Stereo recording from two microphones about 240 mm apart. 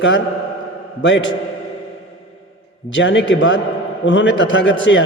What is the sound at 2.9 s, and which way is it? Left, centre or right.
A man's voice, left.